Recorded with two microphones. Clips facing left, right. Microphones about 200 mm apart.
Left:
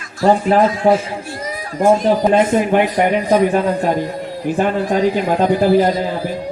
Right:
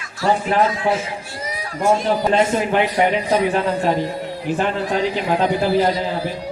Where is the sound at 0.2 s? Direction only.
45° left (ahead or behind).